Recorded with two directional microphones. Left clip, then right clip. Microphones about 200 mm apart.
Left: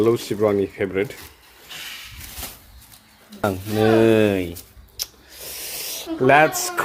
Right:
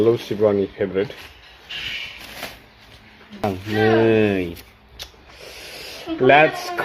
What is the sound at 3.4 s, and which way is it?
Speech, 25° left (ahead or behind).